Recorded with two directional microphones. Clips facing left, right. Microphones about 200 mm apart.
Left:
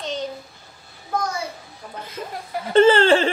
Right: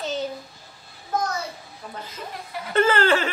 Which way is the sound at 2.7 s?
30° left (ahead or behind).